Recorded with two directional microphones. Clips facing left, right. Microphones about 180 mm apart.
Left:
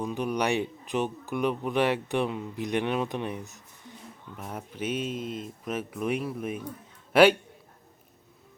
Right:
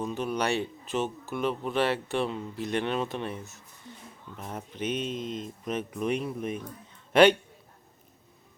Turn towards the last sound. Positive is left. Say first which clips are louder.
# even
turn(degrees=5)  # may be behind; listen again after turning